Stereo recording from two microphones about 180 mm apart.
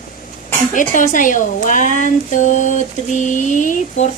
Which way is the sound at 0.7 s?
45° left (ahead or behind).